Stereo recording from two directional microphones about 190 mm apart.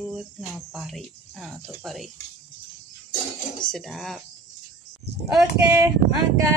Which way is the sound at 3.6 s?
Centre (ahead or behind).